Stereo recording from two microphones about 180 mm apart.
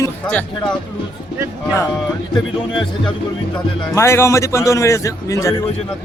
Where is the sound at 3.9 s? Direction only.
15° left (ahead or behind).